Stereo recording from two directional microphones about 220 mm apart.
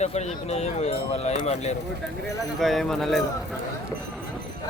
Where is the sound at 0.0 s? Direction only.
30° left (ahead or behind).